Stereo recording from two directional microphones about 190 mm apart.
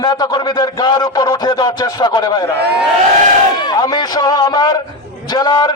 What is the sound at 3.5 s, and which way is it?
A man's voice, 20° left (ahead or behind).